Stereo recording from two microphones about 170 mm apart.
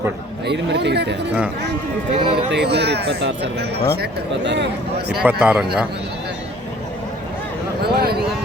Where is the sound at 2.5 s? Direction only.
80° right.